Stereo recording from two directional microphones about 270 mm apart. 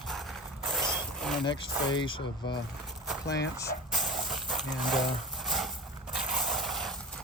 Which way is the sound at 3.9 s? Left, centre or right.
Centre.